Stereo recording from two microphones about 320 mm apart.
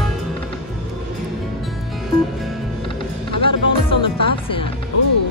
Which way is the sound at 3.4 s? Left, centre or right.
Centre.